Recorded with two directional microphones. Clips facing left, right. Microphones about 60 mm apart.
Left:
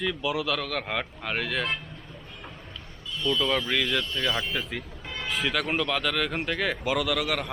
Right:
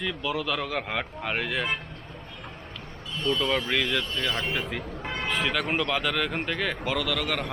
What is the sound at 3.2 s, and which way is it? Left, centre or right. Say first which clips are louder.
Speech: even; right.